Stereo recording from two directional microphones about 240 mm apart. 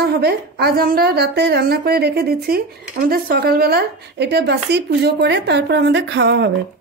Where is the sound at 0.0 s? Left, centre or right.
Right.